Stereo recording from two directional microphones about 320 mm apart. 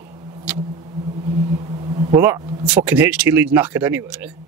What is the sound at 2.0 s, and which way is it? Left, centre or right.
Speech, centre.